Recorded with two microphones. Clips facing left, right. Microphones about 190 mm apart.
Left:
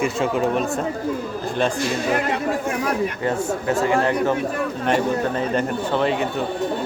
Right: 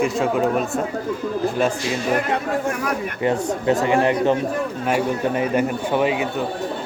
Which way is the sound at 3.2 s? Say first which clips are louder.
Right 2 dB; 20° right (ahead or behind).